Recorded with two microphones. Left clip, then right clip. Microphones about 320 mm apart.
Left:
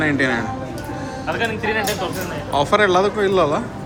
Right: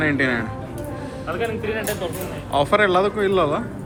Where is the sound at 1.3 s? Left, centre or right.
Left.